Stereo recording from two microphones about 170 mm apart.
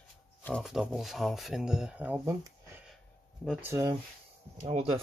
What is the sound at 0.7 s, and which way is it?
Speech, centre (ahead or behind).